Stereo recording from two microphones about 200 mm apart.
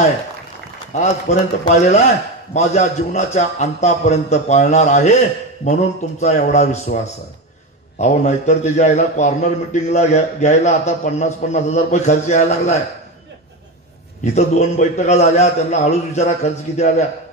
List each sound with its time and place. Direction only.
0.9 s a man's voice: 35° left (ahead or behind)
2.5 s a man's voice: 35° left (ahead or behind)
8.0 s a man's voice: 35° left (ahead or behind)
14.2 s a man's voice: 35° left (ahead or behind)